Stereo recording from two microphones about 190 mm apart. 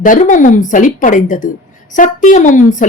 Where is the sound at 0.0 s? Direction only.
45° left (ahead or behind).